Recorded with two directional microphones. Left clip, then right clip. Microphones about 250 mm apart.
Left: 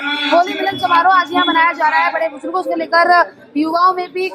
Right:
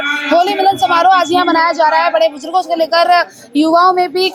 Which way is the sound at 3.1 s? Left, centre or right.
Centre.